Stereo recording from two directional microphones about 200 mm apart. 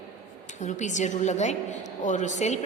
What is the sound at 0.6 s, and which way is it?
A woman's voice, 35° left (ahead or behind).